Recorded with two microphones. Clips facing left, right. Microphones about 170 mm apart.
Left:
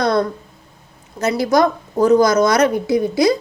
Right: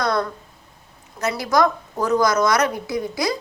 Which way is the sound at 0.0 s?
25° left (ahead or behind).